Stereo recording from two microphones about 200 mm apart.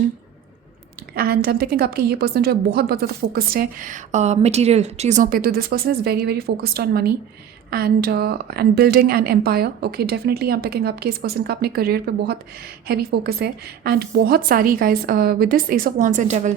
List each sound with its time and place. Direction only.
1.1 s a woman's voice: 50° right (ahead or behind)